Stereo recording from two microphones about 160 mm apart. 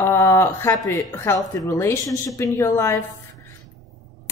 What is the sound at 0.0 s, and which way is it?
A woman's voice, 15° left (ahead or behind).